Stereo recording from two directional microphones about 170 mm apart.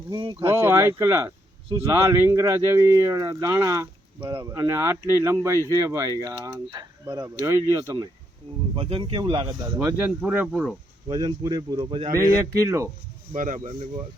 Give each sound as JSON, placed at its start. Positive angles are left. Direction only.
{"t": 0.1, "sound": "speech", "side_deg": -25}
{"t": 0.4, "sound": "speech", "side_deg": -15}
{"t": 8.7, "sound": "speech", "side_deg": -30}
{"t": 9.7, "sound": "speech", "side_deg": -10}
{"t": 11.1, "sound": "speech", "side_deg": -25}
{"t": 13.3, "sound": "speech", "side_deg": -50}